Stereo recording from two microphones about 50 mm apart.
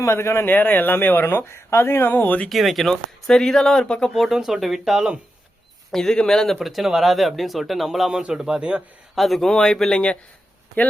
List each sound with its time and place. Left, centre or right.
0.0 s speech: left
0.4 s speech: left
1.5 s speech: left
2.0 s speech: left
2.5 s speech: centre
4.1 s speech: centre
5.9 s speech: centre
6.6 s speech: centre
9.1 s speech: centre